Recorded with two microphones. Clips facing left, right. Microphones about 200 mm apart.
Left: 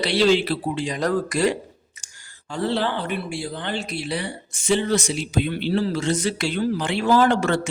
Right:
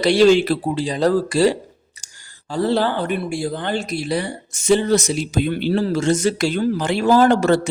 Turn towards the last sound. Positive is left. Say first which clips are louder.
# right 5 dB
turn(degrees=-40)  # may be behind; listen again after turning